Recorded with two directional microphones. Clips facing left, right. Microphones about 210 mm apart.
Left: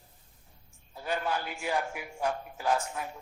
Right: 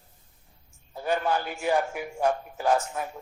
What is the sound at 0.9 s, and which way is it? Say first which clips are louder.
A man's voice: right 6 dB; 50° right (ahead or behind).